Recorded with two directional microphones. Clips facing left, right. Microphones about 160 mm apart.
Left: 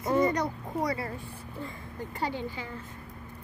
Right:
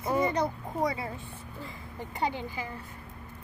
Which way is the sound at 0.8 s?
20° right (ahead or behind).